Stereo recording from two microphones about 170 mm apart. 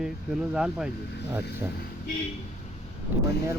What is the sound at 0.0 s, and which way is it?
Speech, 5° right (ahead or behind).